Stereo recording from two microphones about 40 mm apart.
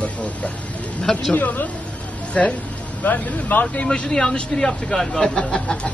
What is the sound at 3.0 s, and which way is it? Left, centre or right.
Speech, left.